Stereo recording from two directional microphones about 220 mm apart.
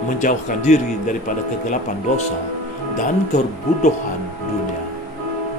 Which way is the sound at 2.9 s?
35° left (ahead or behind).